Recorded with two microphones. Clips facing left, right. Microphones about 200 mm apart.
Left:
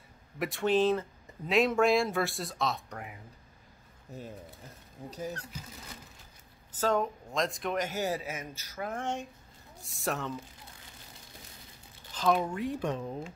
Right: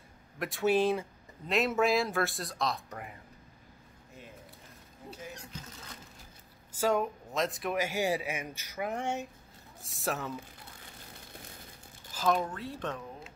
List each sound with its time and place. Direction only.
0.4 s speech: centre (ahead or behind)
4.1 s speech: 35° left (ahead or behind)
6.8 s speech: 10° right (ahead or behind)
12.1 s a sound: 5° right (ahead or behind)
12.4 s speech: 10° left (ahead or behind)